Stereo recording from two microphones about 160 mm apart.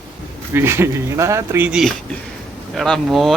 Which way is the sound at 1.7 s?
5° right (ahead or behind).